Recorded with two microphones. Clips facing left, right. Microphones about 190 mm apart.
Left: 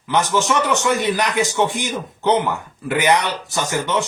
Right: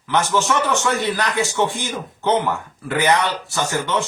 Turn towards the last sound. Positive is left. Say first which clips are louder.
# left 1 dB
turn(degrees=15)  # may be behind; listen again after turning